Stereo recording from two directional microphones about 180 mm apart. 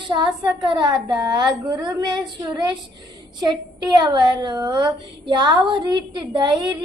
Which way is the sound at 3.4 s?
25° right (ahead or behind).